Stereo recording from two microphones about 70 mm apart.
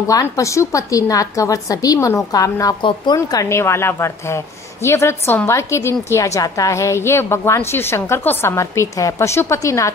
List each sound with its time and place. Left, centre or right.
0.0 s a woman's voice: left
3.1 s a woman's voice: left
3.4 s a woman's voice: left